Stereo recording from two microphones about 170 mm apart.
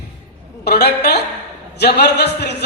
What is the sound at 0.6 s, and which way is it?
A man's voice, 70° left (ahead or behind).